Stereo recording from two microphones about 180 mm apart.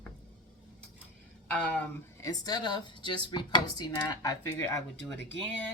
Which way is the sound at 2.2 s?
20° left (ahead or behind).